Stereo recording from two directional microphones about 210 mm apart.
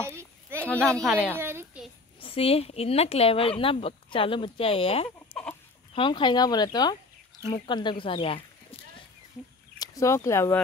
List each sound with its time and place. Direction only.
0.0 s a sound: 10° right (ahead or behind)
0.7 s speech: 5° left (ahead or behind)
1.3 s a sound: 10° right (ahead or behind)
2.1 s speech: 25° left (ahead or behind)
5.3 s chicken: 10° left (ahead or behind)
5.9 s speech: 25° left (ahead or behind)
9.8 s speech: 15° left (ahead or behind)